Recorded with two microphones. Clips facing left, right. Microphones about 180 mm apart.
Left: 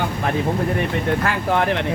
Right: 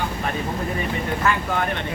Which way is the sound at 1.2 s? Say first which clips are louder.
Left 3 dB; 70° left (ahead or behind).